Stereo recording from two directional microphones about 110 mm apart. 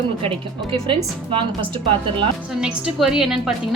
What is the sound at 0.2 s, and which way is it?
A woman's voice, 55° right (ahead or behind).